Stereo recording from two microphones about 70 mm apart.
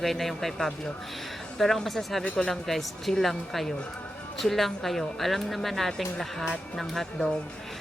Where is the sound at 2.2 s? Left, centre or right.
Centre.